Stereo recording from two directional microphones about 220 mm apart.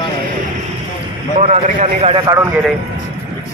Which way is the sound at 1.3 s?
30° right (ahead or behind).